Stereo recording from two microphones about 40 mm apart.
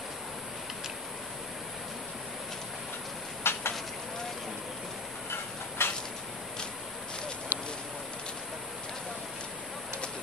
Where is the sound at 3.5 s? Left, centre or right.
Left.